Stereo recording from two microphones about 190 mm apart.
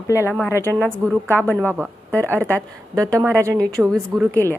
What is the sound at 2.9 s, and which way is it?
Speech, 15° right (ahead or behind).